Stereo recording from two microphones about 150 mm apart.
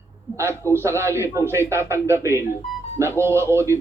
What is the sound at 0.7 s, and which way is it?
A man's voice, 15° right (ahead or behind).